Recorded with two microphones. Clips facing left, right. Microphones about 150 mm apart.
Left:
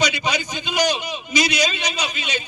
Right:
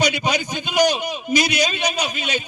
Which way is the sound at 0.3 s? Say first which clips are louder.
Right 2 dB; 50° right (ahead or behind).